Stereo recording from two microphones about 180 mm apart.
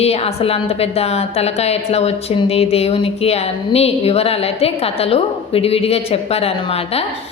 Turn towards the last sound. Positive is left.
turn(degrees=35)  # may be behind; listen again after turning